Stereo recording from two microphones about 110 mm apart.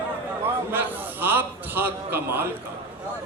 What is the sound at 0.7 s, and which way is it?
A man's voice, 20° right (ahead or behind).